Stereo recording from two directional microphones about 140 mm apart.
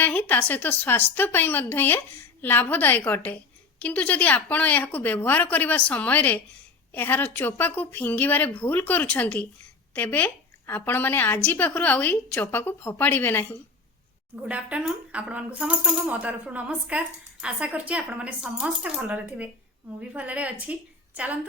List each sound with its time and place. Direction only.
0.0 s a woman's voice: 10° left (ahead or behind)
14.4 s speech: 10° right (ahead or behind)